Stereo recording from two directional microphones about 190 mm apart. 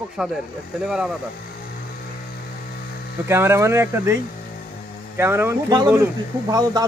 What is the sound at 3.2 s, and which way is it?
Speech, 15° right (ahead or behind).